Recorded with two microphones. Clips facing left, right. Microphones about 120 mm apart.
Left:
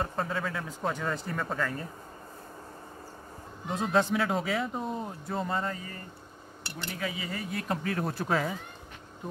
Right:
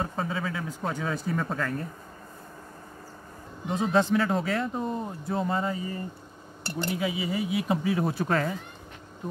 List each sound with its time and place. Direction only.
0.0 s speech: centre (ahead or behind)
3.6 s speech: centre (ahead or behind)
6.6 s speech: 40° right (ahead or behind)
6.9 s speech: 10° right (ahead or behind)